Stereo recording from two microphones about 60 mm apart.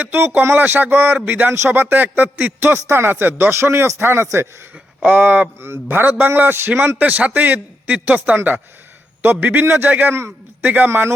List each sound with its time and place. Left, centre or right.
0.0 s a man's voice: right
1.5 s a man's voice: right
5.1 s a man's voice: right
5.5 s a man's voice: right
10.8 s a man's voice: right